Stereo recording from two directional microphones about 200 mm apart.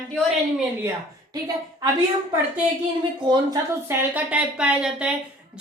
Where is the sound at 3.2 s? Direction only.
20° right (ahead or behind).